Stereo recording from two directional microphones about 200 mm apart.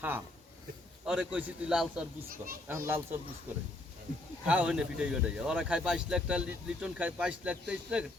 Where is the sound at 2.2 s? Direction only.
45° right (ahead or behind).